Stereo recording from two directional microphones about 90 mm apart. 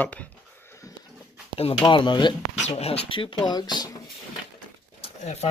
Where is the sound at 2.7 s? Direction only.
75° left (ahead or behind); by 3.7 s 50° left (ahead or behind).